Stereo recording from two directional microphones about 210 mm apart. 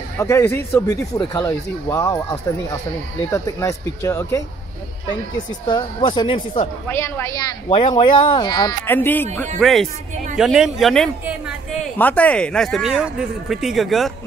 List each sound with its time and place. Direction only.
0.2 s speech: 10° left (ahead or behind)
3.3 s speech: 15° left (ahead or behind)
5.7 s speech: 20° left (ahead or behind)
6.9 s speech: 10° left (ahead or behind)
8.8 s speech: 10° left (ahead or behind)